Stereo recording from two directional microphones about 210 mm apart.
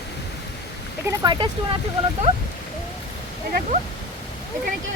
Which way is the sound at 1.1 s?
20° right (ahead or behind).